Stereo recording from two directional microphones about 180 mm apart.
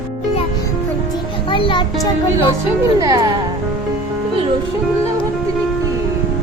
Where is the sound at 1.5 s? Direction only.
25° left (ahead or behind).